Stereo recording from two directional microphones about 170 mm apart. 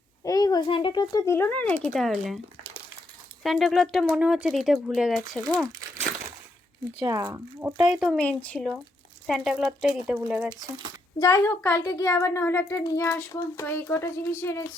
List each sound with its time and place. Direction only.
0.3 s speech: 20° left (ahead or behind); by 2.4 s centre (ahead or behind)
3.4 s speech: centre (ahead or behind)
7.0 s speech: 20° right (ahead or behind)
7.9 s speech: centre (ahead or behind)
11.2 s speech: 15° left (ahead or behind)